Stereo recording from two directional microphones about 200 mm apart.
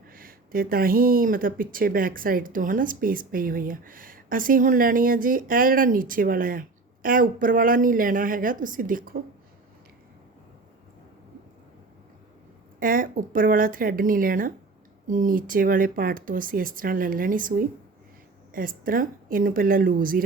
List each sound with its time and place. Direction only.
0.1 s speech: 45° right (ahead or behind)
12.8 s speech: 45° right (ahead or behind)
18.5 s speech: 45° right (ahead or behind)